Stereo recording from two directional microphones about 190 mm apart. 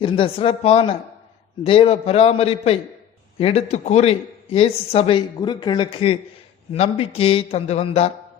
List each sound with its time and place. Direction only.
0.0 s speech: 30° left (ahead or behind)